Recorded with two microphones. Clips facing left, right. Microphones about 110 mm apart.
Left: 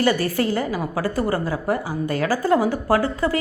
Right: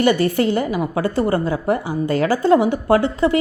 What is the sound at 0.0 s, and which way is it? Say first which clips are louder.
A woman's voice: right 4 dB; 20° right (ahead or behind).